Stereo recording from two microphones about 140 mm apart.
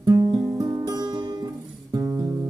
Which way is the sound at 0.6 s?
25° right (ahead or behind).